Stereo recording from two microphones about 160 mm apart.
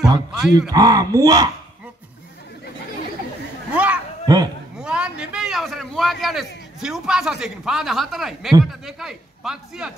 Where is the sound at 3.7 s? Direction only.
10° right (ahead or behind).